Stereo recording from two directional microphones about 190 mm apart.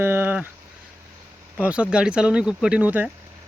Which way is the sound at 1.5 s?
5° right (ahead or behind).